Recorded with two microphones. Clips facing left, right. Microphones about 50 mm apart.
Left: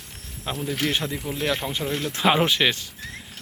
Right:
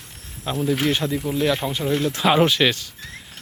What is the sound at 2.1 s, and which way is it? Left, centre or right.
Speech, left.